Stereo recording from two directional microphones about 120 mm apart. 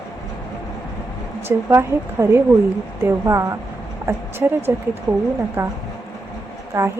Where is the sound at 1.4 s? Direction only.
20° right (ahead or behind).